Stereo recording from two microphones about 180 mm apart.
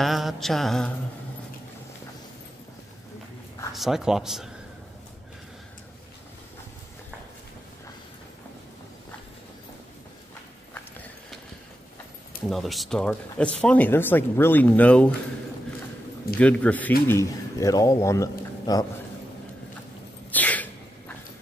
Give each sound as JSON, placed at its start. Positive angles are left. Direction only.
{"t": 0.0, "sound": "mantra", "side_deg": 0}
{"t": 3.7, "sound": "mantra", "side_deg": 0}
{"t": 12.4, "sound": "speech", "side_deg": 0}
{"t": 16.3, "sound": "speech", "side_deg": 5}
{"t": 20.2, "sound": "a sound", "side_deg": 10}